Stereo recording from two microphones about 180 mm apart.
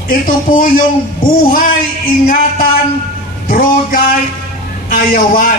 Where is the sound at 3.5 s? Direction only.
50° left (ahead or behind).